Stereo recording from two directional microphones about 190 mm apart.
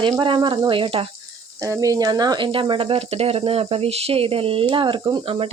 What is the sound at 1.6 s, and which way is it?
Speech, 15° right (ahead or behind).